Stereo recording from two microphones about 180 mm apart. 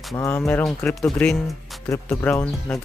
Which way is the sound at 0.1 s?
15° left (ahead or behind).